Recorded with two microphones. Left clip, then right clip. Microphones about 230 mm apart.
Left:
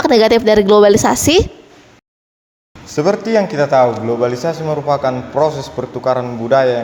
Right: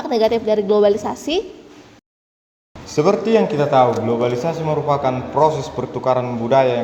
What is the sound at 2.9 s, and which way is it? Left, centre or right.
A man's voice, left.